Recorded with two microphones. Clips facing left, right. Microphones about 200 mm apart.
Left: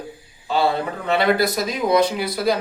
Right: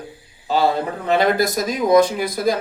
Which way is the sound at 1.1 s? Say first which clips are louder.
Right 1 dB; 45° right (ahead or behind).